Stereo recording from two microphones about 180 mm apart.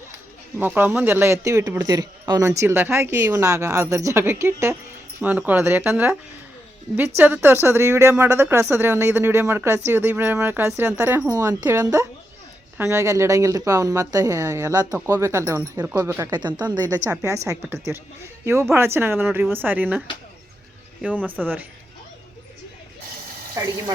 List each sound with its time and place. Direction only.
0.6 s speech: 10° right (ahead or behind)
7.2 s a woman's voice: 10° right (ahead or behind)
21.2 s speech: 10° right (ahead or behind)
23.6 s speech: 20° right (ahead or behind)